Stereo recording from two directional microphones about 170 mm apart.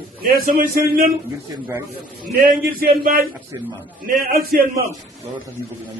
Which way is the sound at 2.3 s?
60° right (ahead or behind).